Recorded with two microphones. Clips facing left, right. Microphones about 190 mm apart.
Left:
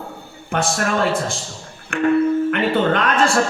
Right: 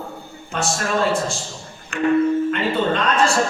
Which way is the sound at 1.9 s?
55° left (ahead or behind).